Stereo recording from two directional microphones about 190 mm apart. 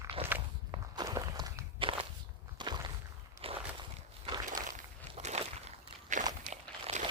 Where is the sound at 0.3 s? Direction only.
10° right (ahead or behind).